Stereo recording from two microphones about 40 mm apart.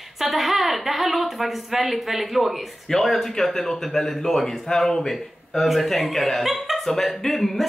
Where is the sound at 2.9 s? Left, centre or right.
Centre.